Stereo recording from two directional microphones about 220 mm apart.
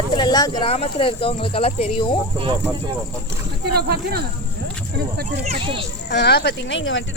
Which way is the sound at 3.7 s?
45° right (ahead or behind).